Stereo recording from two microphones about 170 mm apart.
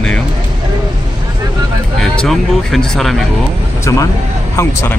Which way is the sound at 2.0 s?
Centre (ahead or behind).